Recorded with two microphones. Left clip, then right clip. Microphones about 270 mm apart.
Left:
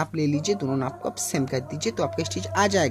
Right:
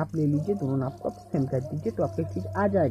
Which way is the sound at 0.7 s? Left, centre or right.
Left.